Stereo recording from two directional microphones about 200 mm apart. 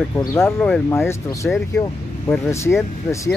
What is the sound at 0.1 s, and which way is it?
Speech, 15° left (ahead or behind).